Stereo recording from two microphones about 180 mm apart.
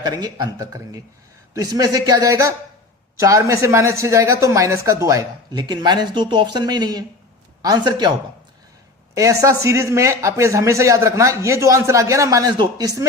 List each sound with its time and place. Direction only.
0.0 s a man's voice: 20° right (ahead or behind)
9.1 s a man's voice: 20° right (ahead or behind)